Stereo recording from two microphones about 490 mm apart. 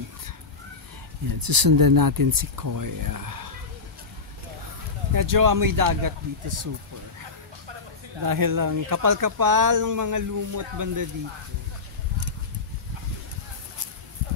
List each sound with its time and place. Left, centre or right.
1.3 s speech: right
5.1 s speech: right
8.2 s speech: right